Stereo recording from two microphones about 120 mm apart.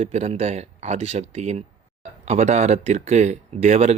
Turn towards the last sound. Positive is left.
turn(degrees=-65)  # may be behind; listen again after turning